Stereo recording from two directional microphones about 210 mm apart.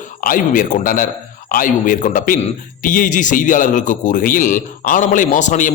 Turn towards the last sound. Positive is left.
turn(degrees=35)  # may be behind; listen again after turning